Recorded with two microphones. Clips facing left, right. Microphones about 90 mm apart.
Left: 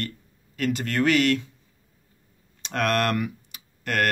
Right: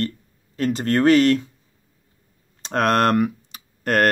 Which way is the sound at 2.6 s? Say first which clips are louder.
Right 5 dB; 35° right (ahead or behind).